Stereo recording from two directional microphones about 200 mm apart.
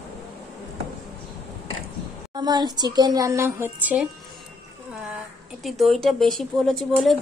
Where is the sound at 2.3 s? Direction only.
20° right (ahead or behind).